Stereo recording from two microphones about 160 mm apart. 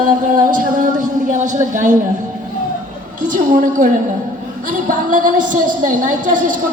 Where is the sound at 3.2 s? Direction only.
55° right (ahead or behind).